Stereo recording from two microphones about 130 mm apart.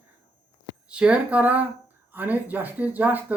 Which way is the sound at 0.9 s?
10° right (ahead or behind).